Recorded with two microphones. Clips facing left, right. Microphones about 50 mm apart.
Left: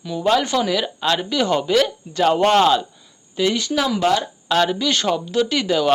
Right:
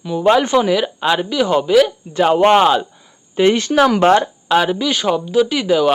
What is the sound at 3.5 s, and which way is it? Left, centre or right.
Speech, right.